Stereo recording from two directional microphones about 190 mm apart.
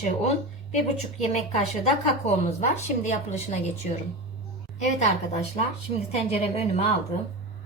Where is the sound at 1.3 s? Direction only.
35° left (ahead or behind).